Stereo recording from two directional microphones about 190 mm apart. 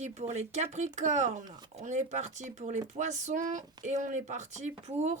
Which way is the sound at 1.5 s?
20° right (ahead or behind).